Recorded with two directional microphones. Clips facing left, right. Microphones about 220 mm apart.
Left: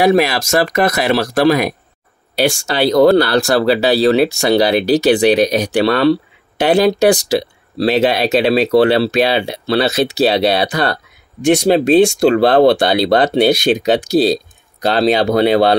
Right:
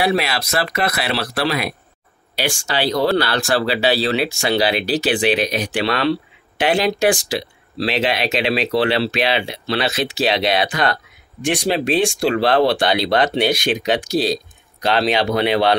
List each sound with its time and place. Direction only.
0.0 s speech: 45° left (ahead or behind)
14.9 s speech: 40° left (ahead or behind)